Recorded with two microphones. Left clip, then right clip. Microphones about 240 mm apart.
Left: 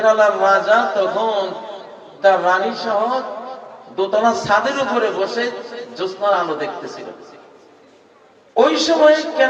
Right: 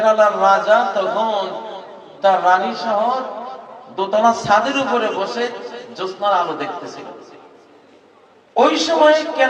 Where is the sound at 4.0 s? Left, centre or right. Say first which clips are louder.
Right 1 dB; right.